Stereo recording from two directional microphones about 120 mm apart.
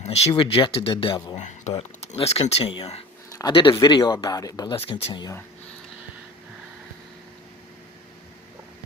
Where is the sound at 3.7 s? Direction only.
40° left (ahead or behind).